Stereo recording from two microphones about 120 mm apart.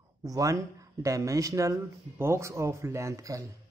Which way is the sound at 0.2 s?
30° right (ahead or behind).